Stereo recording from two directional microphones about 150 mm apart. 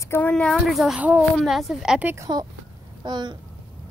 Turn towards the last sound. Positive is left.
turn(degrees=-30)  # may be behind; listen again after turning